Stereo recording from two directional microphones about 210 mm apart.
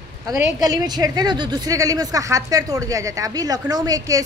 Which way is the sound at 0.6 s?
20° right (ahead or behind).